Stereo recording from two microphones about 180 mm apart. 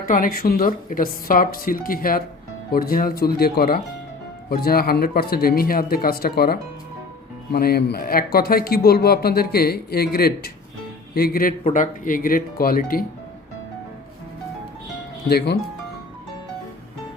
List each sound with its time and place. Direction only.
0.1 s speech: 50° left (ahead or behind)
11.6 s speech: 45° left (ahead or behind)
15.3 s speech: 60° left (ahead or behind)